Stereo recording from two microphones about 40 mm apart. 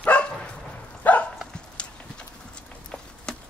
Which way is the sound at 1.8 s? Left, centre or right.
Left.